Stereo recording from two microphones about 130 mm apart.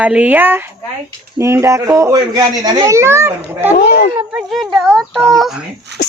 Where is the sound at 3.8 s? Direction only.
90° left.